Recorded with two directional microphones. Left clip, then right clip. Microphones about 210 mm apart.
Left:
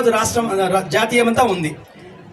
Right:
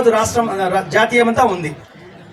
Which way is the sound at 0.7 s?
25° left (ahead or behind).